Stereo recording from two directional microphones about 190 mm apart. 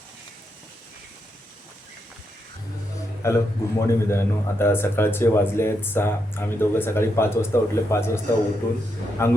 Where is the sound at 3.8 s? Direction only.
15° left (ahead or behind).